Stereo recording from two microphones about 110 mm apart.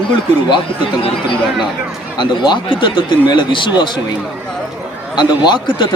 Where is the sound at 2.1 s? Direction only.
45° left (ahead or behind).